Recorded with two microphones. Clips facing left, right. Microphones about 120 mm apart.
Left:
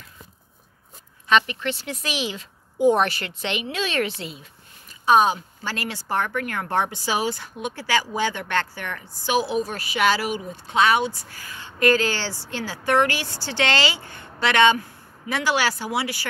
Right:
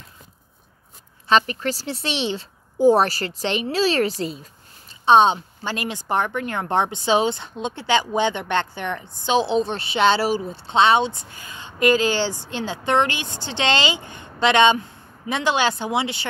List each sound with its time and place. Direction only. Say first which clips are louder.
1.3 s speech: right 2 dB; 40° right (ahead or behind)
5.0 s speech: right 3 dB; 25° right (ahead or behind)